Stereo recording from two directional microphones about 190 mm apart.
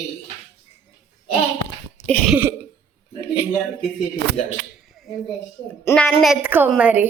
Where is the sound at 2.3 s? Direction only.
10° right (ahead or behind).